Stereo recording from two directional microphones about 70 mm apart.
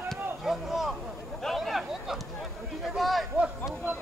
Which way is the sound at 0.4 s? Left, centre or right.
Centre.